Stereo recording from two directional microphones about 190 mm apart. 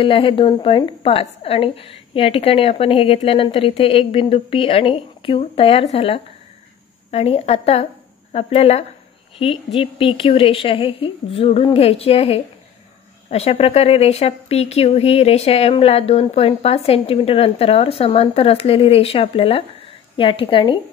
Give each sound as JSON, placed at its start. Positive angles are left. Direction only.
{"t": 0.0, "sound": "a woman's voice", "side_deg": 25}